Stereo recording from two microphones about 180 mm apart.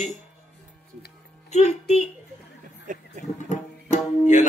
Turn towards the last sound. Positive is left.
turn(degrees=40)  # may be behind; listen again after turning